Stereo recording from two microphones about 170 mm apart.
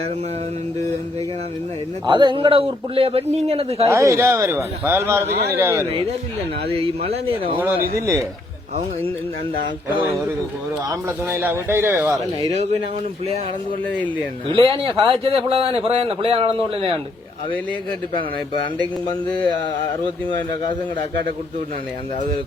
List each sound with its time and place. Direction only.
2.0 s a man's voice: 30° right (ahead or behind)
3.8 s a man's voice: 20° right (ahead or behind)
6.7 s a man's voice: 35° right (ahead or behind)
11.3 s a man's voice: 15° right (ahead or behind)
14.5 s a man's voice: 30° right (ahead or behind)